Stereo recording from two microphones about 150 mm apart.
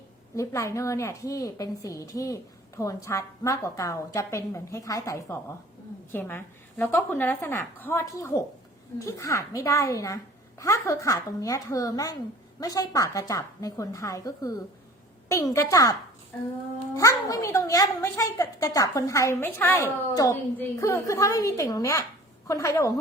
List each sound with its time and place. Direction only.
0.3 s a woman's voice: 20° left (ahead or behind)